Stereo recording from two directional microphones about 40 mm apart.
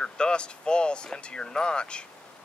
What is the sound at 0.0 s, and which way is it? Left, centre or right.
Speech, left.